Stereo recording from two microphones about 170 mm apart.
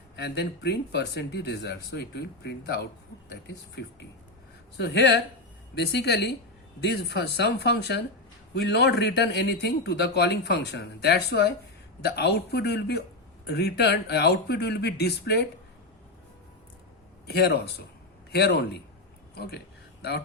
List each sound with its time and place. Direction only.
0.2 s speech: 75° left (ahead or behind)
3.2 s speech: 90° left
5.7 s speech: 75° left (ahead or behind)
8.5 s speech: 85° left
17.2 s speech: 70° left (ahead or behind)
19.3 s a sound: 70° left (ahead or behind)